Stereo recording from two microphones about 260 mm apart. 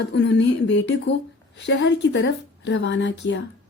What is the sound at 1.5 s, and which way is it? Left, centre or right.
A woman's voice, left.